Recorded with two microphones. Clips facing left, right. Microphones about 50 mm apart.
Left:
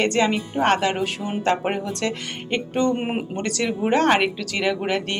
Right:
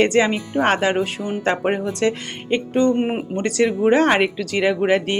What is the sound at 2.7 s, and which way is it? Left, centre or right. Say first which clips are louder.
A woman's voice: right 4 dB; centre.